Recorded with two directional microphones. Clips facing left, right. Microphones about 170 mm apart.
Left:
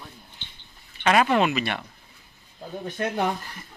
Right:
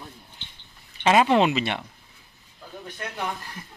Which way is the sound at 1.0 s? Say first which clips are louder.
Right 2 dB; 25° right (ahead or behind).